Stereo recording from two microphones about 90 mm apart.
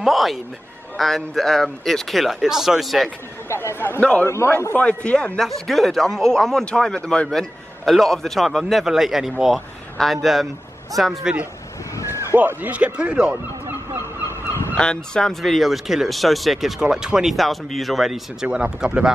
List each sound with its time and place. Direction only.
0.0 s a man's voice: centre (ahead or behind)
3.4 s speech: 30° left (ahead or behind)
4.0 s a man's voice: 15° left (ahead or behind)
11.9 s a sound: 35° left (ahead or behind)
12.4 s speech: 20° right (ahead or behind)
14.8 s a man's voice: 5° left (ahead or behind); by 19.1 s 10° right (ahead or behind)